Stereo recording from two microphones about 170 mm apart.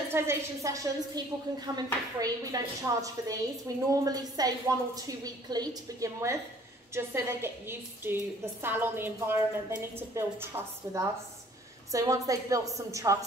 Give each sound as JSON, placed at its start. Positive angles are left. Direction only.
{"t": 0.1, "sound": "a woman's voice", "side_deg": -15}